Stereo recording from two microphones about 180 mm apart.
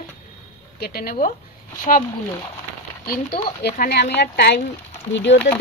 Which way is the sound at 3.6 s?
60° left (ahead or behind).